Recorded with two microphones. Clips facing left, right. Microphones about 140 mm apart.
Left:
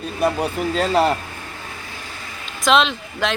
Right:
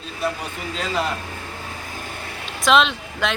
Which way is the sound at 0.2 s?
45° left (ahead or behind).